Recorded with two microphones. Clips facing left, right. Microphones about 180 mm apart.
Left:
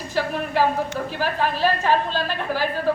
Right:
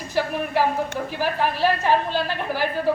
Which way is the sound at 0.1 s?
15° right (ahead or behind).